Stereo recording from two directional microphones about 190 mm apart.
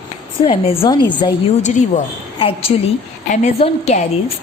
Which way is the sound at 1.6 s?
40° left (ahead or behind).